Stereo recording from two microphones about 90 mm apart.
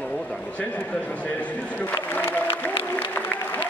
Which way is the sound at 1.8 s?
20° left (ahead or behind).